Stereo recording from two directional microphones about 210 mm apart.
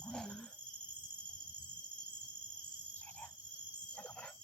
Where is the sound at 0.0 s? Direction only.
5° left (ahead or behind).